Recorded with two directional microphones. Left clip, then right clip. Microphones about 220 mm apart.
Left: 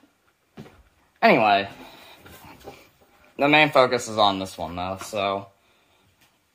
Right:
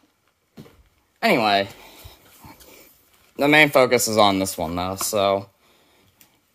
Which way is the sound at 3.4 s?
35° right (ahead or behind).